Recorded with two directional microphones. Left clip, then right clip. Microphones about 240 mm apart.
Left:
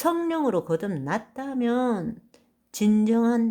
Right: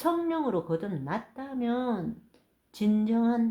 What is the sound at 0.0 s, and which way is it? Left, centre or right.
Speech, left.